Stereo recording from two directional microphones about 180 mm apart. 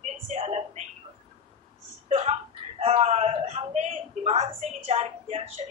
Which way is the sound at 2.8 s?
40° right (ahead or behind).